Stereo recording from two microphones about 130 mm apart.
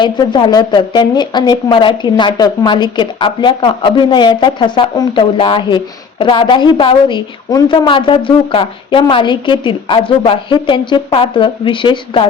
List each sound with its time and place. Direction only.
0.0 s a woman's voice: 35° left (ahead or behind)